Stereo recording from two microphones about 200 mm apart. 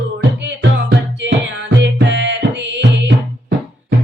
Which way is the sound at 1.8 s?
65° right (ahead or behind).